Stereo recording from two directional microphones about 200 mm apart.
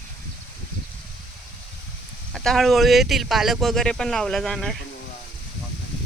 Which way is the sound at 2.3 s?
Centre (ahead or behind).